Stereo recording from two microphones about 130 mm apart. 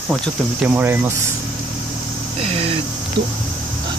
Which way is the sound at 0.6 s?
15° right (ahead or behind).